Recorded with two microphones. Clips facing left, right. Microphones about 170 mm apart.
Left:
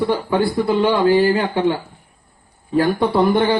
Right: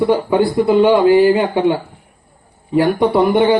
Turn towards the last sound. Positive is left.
turn(degrees=-20)  # may be behind; listen again after turning